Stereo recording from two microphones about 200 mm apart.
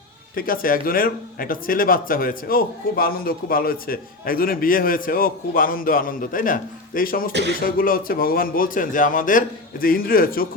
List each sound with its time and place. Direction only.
0.3 s speech: 45° left (ahead or behind)